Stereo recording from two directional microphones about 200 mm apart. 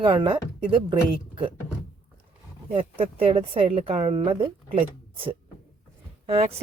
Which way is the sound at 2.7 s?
30° right (ahead or behind).